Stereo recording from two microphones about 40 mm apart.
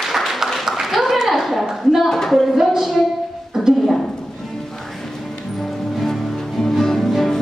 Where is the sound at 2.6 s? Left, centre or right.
Centre.